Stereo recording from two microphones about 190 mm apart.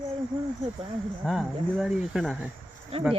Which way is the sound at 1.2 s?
Centre (ahead or behind).